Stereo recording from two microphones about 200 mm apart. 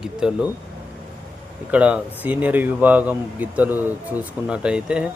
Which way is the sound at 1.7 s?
5° right (ahead or behind).